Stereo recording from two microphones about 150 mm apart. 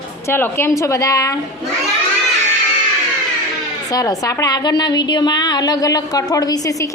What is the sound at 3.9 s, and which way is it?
A woman's voice, 25° left (ahead or behind).